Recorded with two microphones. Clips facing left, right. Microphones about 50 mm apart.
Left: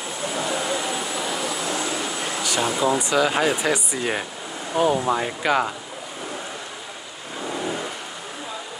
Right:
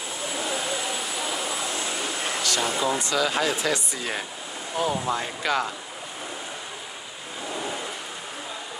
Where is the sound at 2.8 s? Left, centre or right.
Centre.